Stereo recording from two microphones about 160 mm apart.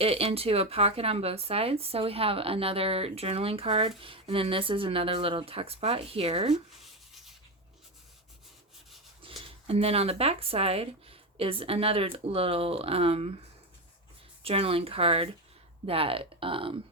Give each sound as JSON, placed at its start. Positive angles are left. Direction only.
{"t": 0.0, "sound": "speech", "side_deg": -35}
{"t": 6.8, "sound": "a sound", "side_deg": 0}
{"t": 9.2, "sound": "speech", "side_deg": -35}
{"t": 14.4, "sound": "speech", "side_deg": -40}